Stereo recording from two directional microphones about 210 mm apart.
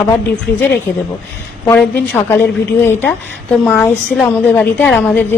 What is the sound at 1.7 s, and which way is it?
A woman's voice, 10° left (ahead or behind).